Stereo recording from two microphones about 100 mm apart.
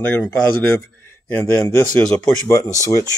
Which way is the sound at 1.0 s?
25° left (ahead or behind).